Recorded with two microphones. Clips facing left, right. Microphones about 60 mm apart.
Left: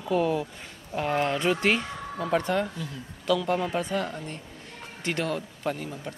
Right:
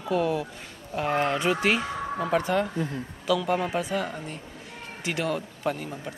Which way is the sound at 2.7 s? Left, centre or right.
Right.